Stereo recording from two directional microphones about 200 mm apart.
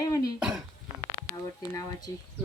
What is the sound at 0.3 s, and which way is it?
Speech, 5° right (ahead or behind).